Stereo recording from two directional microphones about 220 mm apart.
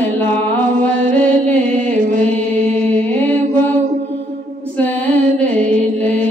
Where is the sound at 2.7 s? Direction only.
5° left (ahead or behind).